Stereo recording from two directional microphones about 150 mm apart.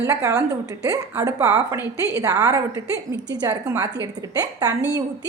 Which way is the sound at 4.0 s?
25° right (ahead or behind).